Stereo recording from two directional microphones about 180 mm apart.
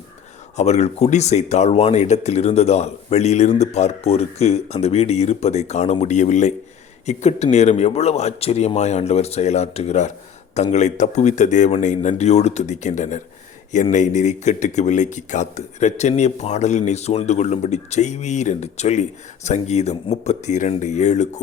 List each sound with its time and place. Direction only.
0.5 s speech: 40° left (ahead or behind)